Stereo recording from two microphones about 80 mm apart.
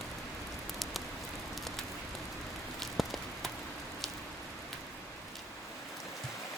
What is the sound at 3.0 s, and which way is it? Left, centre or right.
Rain on surface, centre.